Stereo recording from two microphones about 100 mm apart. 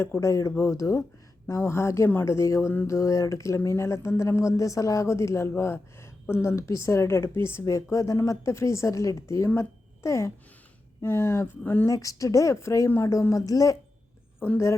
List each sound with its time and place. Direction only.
0.0 s a woman's voice: 30° left (ahead or behind)
11.9 s a woman's voice: 35° left (ahead or behind)
14.3 s a woman's voice: 20° left (ahead or behind)